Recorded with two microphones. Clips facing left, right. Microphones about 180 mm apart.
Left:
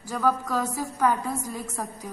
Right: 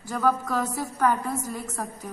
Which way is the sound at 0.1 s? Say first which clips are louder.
Even; 5° left (ahead or behind).